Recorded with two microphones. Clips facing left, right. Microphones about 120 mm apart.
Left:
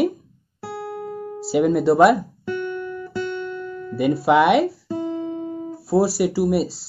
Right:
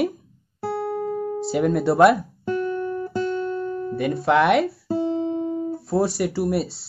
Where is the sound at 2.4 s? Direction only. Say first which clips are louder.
Right 2 dB; 35° right (ahead or behind).